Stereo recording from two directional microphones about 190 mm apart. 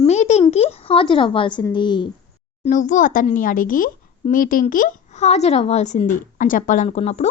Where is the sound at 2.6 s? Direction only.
40° left (ahead or behind).